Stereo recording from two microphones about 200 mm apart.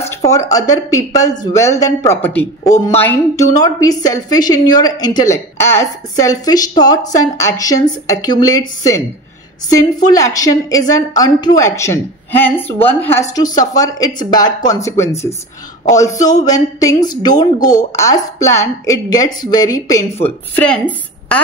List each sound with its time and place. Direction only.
0.1 s a woman's voice: 15° left (ahead or behind)
10.0 s a woman's voice: 15° left (ahead or behind)
20.5 s a woman's voice: 5° left (ahead or behind)